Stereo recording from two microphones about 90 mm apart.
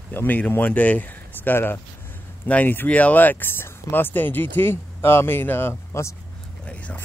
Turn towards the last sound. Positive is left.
turn(degrees=15)  # may be behind; listen again after turning